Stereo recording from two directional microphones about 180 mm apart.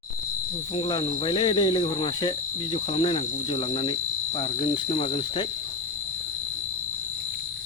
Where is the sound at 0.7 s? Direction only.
30° left (ahead or behind).